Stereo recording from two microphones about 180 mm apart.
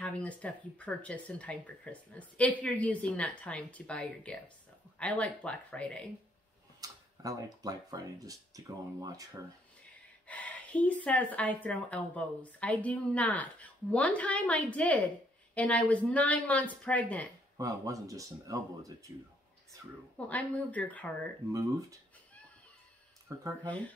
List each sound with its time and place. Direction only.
0.0 s a woman's voice: 5° left (ahead or behind)
6.8 s speech: 20° right (ahead or behind)
10.2 s a woman's voice: 10° left (ahead or behind)
17.6 s speech: 20° right (ahead or behind)
20.2 s a woman's voice: 10° left (ahead or behind)
23.2 s speech: 15° right (ahead or behind)